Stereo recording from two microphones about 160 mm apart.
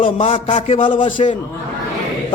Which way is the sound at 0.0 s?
35° left (ahead or behind).